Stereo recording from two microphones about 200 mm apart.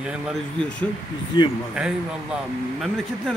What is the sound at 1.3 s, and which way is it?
Speech, 20° left (ahead or behind).